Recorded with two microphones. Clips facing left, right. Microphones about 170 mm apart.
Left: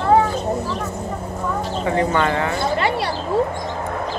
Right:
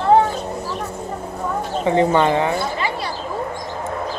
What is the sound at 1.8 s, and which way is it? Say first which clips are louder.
Speech: right 4 dB; 20° right (ahead or behind).